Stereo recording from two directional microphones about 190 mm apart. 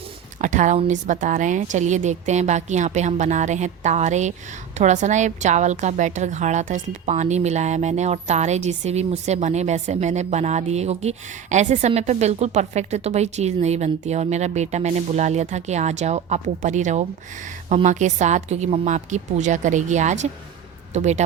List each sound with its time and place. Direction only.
0.4 s a woman's voice: 40° right (ahead or behind)